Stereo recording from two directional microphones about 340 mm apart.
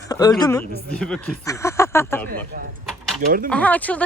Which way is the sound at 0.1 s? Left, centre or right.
Centre.